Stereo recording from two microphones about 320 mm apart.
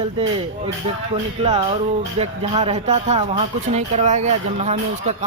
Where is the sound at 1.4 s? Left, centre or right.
Centre.